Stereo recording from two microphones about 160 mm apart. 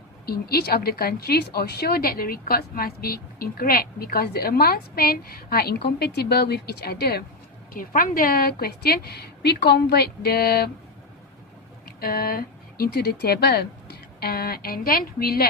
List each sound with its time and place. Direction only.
0.3 s a woman's voice: 75° left (ahead or behind)
7.7 s a woman's voice: 60° left (ahead or behind)
11.9 s speech: 70° left (ahead or behind)